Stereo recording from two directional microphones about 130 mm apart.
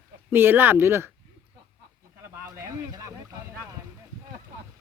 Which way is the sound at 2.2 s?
20° right (ahead or behind).